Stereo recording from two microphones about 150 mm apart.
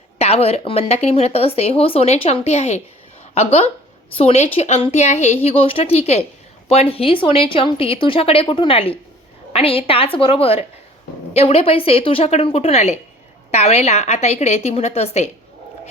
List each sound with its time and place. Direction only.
0.2 s speech: 40° left (ahead or behind)